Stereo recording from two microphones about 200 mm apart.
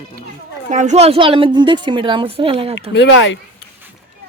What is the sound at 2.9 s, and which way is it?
Speech, 65° left (ahead or behind).